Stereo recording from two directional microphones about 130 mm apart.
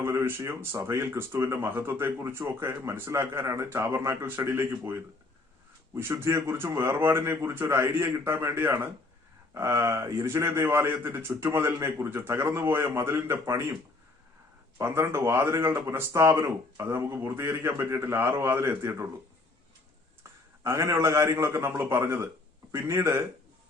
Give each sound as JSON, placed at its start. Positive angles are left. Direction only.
{"t": 0.0, "sound": "speech", "side_deg": -20}
{"t": 14.8, "sound": "speech", "side_deg": -20}
{"t": 20.7, "sound": "speech", "side_deg": -20}